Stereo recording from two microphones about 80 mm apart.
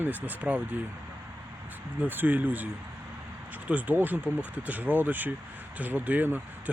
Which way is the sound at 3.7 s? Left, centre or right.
Right.